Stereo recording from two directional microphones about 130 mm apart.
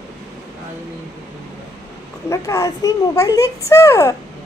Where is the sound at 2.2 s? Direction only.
25° left (ahead or behind).